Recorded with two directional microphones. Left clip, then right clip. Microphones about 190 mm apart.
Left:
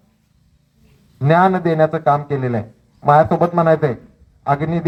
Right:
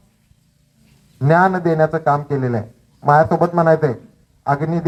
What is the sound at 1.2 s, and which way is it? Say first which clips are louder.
Speech: even; 25° left (ahead or behind).